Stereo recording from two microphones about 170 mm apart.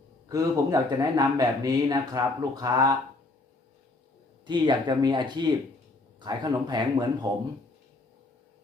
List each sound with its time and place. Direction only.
0.3 s a man's voice: 20° right (ahead or behind)
4.4 s a man's voice: 25° right (ahead or behind)